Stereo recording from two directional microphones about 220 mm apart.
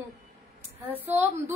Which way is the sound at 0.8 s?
10° right (ahead or behind).